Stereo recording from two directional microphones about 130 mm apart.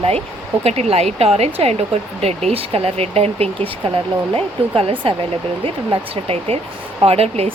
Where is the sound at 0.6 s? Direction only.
55° right (ahead or behind).